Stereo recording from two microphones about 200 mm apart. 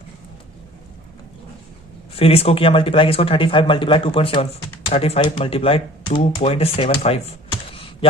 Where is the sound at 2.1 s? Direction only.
30° left (ahead or behind).